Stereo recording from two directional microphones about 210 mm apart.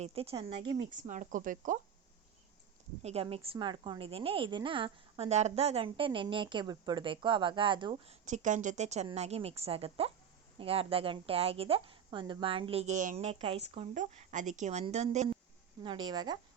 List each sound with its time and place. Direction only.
0.0 s a woman's voice: 30° right (ahead or behind)
1.0 s speech: 35° right (ahead or behind)
3.0 s a woman's voice: 30° right (ahead or behind)
15.8 s a woman's voice: 20° right (ahead or behind)